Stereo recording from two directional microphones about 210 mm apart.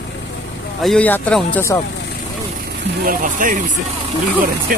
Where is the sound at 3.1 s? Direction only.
40° right (ahead or behind).